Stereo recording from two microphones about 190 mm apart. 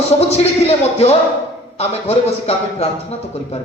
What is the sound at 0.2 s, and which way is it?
Speech, 35° left (ahead or behind).